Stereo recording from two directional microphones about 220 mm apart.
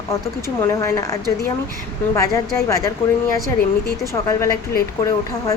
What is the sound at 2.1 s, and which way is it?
Speech, 15° left (ahead or behind).